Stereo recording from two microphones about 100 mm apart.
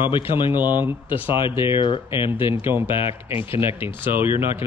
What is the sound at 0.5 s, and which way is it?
Speech, 20° right (ahead or behind).